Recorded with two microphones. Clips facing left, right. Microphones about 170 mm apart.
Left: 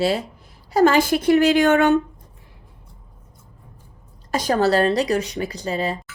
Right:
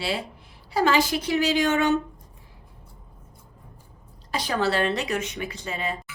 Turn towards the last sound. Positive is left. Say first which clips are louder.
# left 6 dB
turn(degrees=35)  # may be behind; listen again after turning